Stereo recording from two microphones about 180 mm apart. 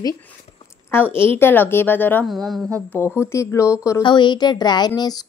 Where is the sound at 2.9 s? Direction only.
15° left (ahead or behind).